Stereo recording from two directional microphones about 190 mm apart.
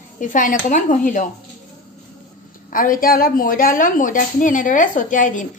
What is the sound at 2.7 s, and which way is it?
A woman's voice, 45° left (ahead or behind).